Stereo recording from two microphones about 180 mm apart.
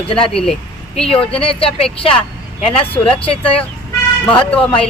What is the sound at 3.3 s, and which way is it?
Speech, 30° left (ahead or behind).